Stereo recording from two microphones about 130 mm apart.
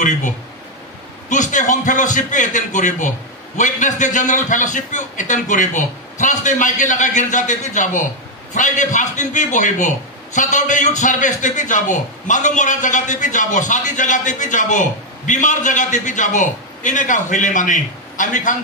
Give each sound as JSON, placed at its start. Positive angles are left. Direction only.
{"t": 1.3, "sound": "a man's voice", "side_deg": 75}